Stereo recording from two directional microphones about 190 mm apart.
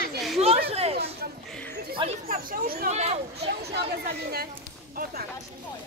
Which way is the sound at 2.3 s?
50° right (ahead or behind).